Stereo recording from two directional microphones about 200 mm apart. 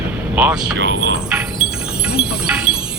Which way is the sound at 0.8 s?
60° right (ahead or behind).